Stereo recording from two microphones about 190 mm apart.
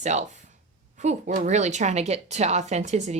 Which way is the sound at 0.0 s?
40° right (ahead or behind).